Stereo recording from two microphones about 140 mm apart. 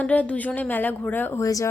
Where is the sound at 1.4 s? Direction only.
25° left (ahead or behind).